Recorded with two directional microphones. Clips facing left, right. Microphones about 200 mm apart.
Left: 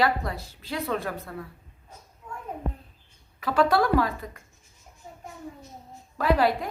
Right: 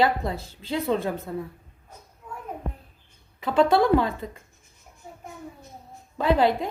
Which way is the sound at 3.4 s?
25° right (ahead or behind).